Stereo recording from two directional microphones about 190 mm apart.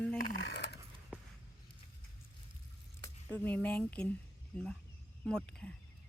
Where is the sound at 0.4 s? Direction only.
60° left (ahead or behind).